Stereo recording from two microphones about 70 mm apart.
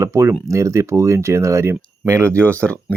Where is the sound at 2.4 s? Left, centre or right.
Centre.